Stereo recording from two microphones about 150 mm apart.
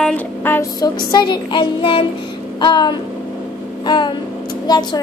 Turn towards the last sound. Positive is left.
turn(degrees=30)  # may be behind; listen again after turning